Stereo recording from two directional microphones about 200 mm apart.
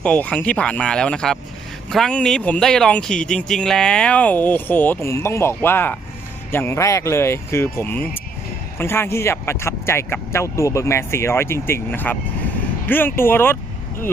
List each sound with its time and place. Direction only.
0.0 s speech: 5° left (ahead or behind)